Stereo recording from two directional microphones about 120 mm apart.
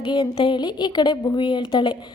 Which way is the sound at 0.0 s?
45° left (ahead or behind).